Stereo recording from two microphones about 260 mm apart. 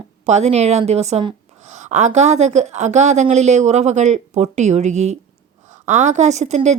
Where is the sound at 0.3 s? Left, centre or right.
Right.